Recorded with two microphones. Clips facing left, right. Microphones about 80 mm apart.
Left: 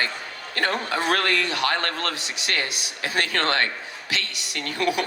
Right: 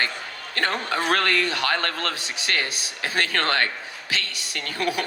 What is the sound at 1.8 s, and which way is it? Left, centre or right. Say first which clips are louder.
Speech: even; left.